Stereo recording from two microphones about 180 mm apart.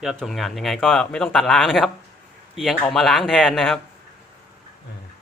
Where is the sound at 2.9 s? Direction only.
Centre (ahead or behind).